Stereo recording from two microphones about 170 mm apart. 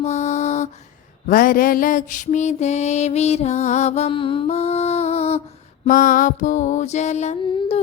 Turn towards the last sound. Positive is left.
turn(degrees=35)  # may be behind; listen again after turning